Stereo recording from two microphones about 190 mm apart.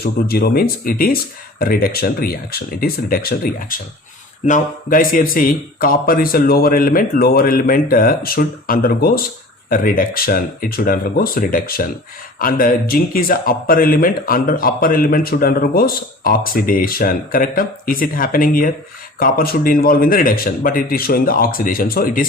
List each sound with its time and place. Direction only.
0.0 s speech: 55° left (ahead or behind)